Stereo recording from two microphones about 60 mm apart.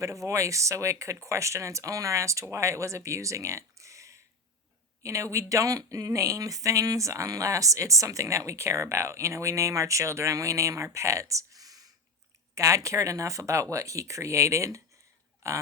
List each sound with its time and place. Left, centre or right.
0.0 s speech: right
12.5 s speech: right